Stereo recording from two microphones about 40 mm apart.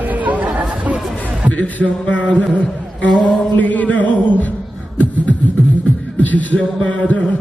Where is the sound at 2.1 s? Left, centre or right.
Left.